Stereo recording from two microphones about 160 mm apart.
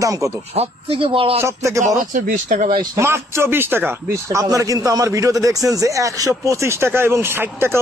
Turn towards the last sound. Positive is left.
turn(degrees=-15)  # may be behind; listen again after turning